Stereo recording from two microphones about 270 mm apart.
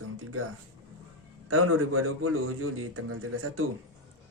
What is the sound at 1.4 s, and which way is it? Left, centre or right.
A man's voice, right.